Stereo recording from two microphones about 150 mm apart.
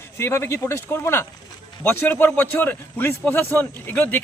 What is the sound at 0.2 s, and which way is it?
A man's voice, 15° left (ahead or behind).